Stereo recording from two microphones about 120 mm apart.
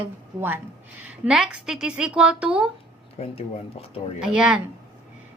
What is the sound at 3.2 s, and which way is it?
Speech, 60° left (ahead or behind).